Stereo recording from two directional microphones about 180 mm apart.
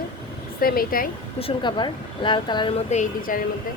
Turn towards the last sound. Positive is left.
turn(degrees=40)  # may be behind; listen again after turning